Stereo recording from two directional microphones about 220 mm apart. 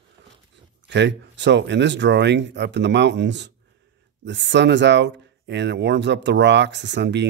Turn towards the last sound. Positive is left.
turn(degrees=-50)  # may be behind; listen again after turning